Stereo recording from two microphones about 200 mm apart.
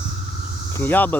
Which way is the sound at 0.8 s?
10° left (ahead or behind).